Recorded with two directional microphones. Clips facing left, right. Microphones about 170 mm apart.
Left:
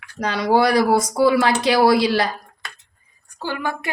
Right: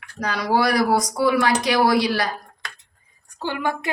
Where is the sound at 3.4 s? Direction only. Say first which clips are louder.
Right 1 dB; 20° right (ahead or behind).